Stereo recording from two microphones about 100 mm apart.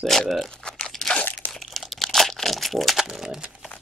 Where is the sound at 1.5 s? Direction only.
Centre (ahead or behind).